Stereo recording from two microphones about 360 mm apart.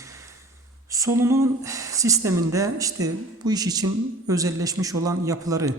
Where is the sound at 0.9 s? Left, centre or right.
Centre.